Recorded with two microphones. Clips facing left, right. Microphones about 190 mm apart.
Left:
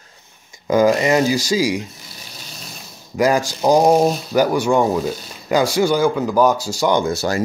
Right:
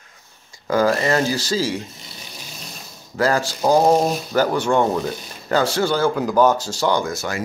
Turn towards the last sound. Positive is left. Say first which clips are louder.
# left 6 dB
turn(degrees=35)  # may be behind; listen again after turning